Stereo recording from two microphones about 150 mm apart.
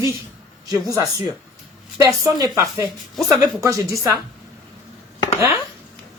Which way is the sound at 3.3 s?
20° right (ahead or behind).